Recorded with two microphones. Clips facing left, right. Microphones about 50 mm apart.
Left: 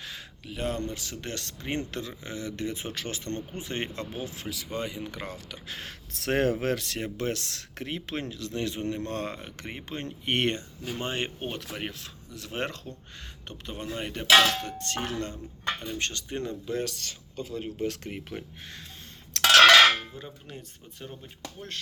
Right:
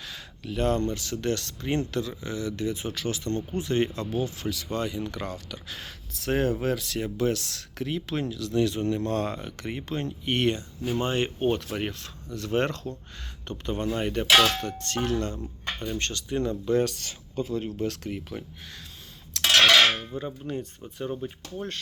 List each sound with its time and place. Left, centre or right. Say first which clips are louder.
0.4 s speech: right 6 dB; centre; by 3.4 s left
3.5 s speech: right 8 dB; centre
6.2 s speech: even; left
6.8 s speech: right 4 dB; left
10.1 s speech: right 1 dB; left
11.0 s speech: right 3 dB; centre
11.5 s speech: right 6 dB; centre; by 16.5 s left
16.6 s speech: right 7 dB; centre
17.5 s speech: right 3 dB; centre
17.7 s speech: right 2 dB; centre
19.3 s a sound: left 3 dB; left
20.0 s speech: right 7 dB; centre